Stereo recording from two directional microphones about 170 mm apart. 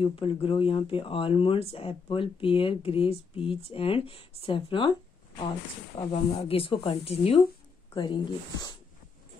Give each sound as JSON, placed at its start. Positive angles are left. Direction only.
{"t": 0.0, "sound": "speech", "side_deg": 35}
{"t": 5.9, "sound": "speech", "side_deg": 35}